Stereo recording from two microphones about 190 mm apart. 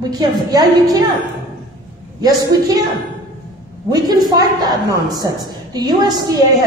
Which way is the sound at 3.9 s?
20° right (ahead or behind).